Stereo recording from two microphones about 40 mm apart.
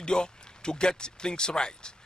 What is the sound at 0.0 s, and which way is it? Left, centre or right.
A man's voice, left.